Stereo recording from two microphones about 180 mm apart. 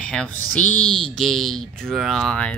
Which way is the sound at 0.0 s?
5° left (ahead or behind).